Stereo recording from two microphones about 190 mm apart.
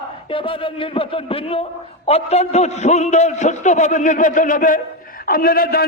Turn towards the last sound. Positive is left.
turn(degrees=55)  # may be behind; listen again after turning